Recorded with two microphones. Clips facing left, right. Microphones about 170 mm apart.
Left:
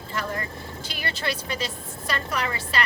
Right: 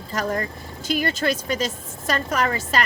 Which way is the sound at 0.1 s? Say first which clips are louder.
Right 5 dB; 45° right (ahead or behind).